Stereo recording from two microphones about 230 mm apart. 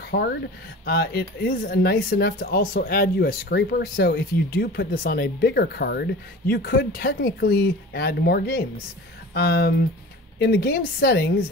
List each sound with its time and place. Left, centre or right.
0.1 s speech: left